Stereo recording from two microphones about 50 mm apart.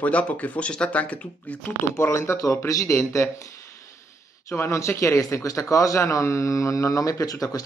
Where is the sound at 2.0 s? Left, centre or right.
Left.